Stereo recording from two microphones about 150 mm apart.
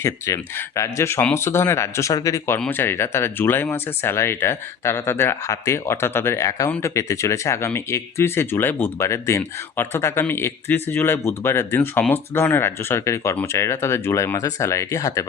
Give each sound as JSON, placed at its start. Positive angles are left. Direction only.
{"t": 0.3, "sound": "speech", "side_deg": 20}